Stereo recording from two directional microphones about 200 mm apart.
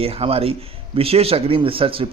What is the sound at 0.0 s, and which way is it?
Speech, 30° right (ahead or behind).